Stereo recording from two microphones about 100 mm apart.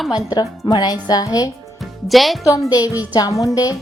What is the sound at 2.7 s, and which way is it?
Speech, 35° left (ahead or behind).